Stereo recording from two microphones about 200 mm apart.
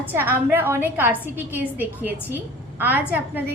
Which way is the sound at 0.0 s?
10° right (ahead or behind).